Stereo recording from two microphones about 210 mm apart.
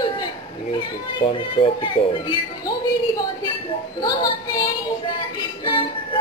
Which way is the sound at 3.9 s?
20° left (ahead or behind).